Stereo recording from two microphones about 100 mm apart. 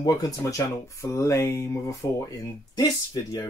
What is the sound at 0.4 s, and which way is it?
Speech, 25° left (ahead or behind).